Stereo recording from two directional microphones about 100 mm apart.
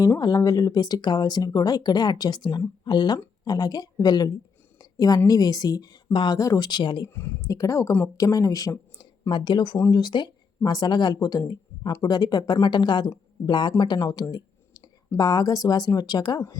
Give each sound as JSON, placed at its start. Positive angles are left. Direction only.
{"t": 0.2, "sound": "a woman's voice", "side_deg": 40}
{"t": 6.4, "sound": "speech", "side_deg": 35}
{"t": 6.7, "sound": "speech", "side_deg": 50}
{"t": 7.1, "sound": "speech", "side_deg": 25}
{"t": 7.4, "sound": "speech", "side_deg": 35}
{"t": 9.3, "sound": "speech", "side_deg": 50}